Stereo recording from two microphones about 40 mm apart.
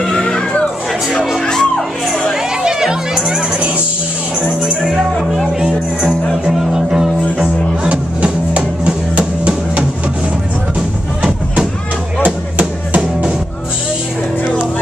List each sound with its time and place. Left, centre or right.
0.0 s chatter: centre
1.4 s music: centre
2.6 s music: centre
3.5 s music: right
6.4 s music: centre
7.9 s music: right